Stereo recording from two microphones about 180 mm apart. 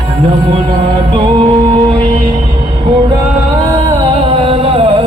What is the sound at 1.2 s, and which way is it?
Music, 30° right (ahead or behind).